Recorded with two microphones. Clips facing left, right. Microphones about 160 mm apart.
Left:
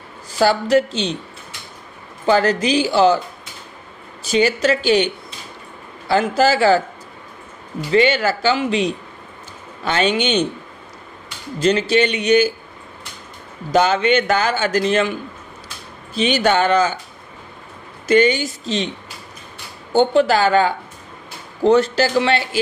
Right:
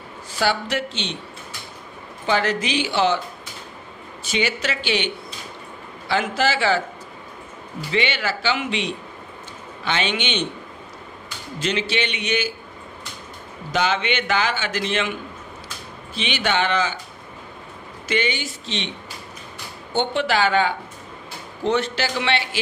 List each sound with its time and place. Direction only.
0.4 s a man's voice: 40° left (ahead or behind)
2.2 s a man's voice: 40° left (ahead or behind)
4.2 s a man's voice: 40° left (ahead or behind)
7.9 s a man's voice: 40° left (ahead or behind)
11.6 s a man's voice: 40° left (ahead or behind)
13.7 s a man's voice: 40° left (ahead or behind)
16.2 s a man's voice: 40° left (ahead or behind)
18.0 s a man's voice: 45° left (ahead or behind)
19.9 s a man's voice: 40° left (ahead or behind)